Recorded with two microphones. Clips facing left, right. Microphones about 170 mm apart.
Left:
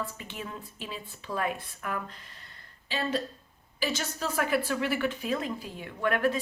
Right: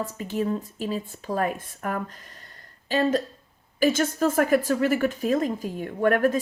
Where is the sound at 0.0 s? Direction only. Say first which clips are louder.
Right 10 dB; 40° right (ahead or behind).